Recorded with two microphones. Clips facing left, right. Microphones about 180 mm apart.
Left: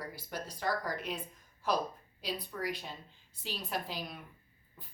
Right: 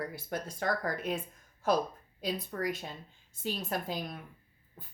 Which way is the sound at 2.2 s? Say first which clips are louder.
Right 4 dB; 45° right (ahead or behind).